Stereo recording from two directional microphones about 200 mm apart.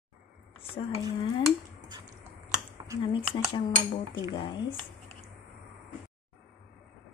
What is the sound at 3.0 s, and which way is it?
Cutlery, 25° left (ahead or behind).